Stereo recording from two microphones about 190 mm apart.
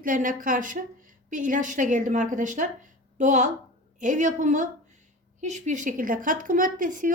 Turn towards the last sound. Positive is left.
turn(degrees=-45)  # may be behind; listen again after turning